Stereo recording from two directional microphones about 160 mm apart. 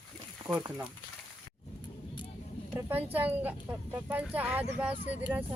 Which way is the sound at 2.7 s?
10° right (ahead or behind).